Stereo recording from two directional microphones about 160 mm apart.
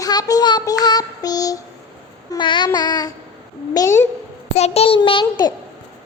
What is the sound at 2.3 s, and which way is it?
Speech, 30° left (ahead or behind).